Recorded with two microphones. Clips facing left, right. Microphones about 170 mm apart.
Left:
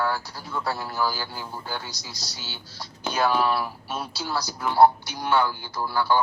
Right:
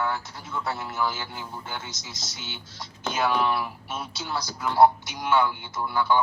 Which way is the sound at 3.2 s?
35° left (ahead or behind).